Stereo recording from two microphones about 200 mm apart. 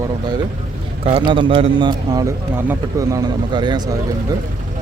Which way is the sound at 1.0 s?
25° right (ahead or behind).